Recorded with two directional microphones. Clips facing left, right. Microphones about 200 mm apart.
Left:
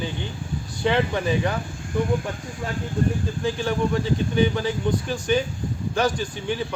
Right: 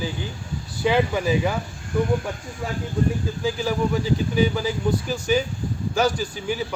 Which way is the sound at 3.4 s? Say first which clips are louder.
Even; 5° right (ahead or behind).